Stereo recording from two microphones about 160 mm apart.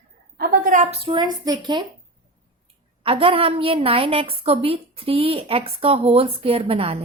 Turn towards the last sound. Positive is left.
turn(degrees=-35)  # may be behind; listen again after turning